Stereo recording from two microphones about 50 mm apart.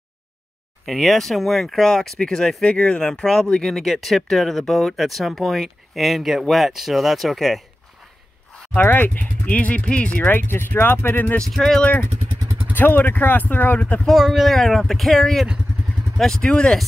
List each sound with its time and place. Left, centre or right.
0.8 s speech: centre
8.7 s speech: left
10.2 s speech: left
11.4 s speech: centre
13.0 s speech: left
14.1 s speech: centre